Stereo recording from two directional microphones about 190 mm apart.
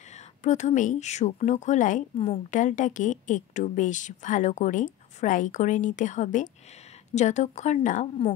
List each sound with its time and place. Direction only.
0.1 s speech: 40° left (ahead or behind)